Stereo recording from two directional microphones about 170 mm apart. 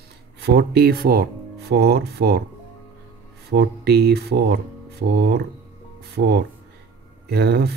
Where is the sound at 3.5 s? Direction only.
70° right (ahead or behind).